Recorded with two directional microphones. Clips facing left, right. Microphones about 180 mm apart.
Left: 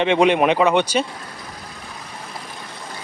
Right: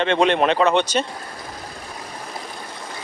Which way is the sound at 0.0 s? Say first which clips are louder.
Left 2 dB; 10° left (ahead or behind).